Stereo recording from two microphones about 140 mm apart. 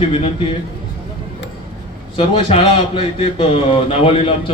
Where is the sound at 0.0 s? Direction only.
40° left (ahead or behind).